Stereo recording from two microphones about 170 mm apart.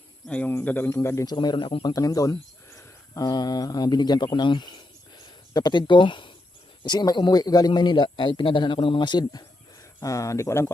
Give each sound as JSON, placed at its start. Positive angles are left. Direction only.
{"t": 0.3, "sound": "a man's voice", "side_deg": 5}